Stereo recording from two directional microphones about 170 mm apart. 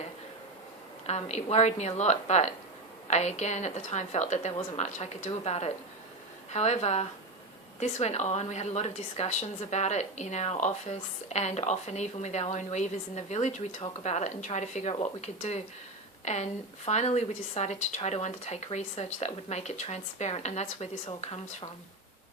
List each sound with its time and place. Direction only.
1.0 s a woman's voice: 40° left (ahead or behind)